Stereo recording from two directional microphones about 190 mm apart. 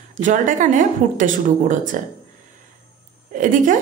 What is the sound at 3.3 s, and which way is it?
Speech, 45° right (ahead or behind).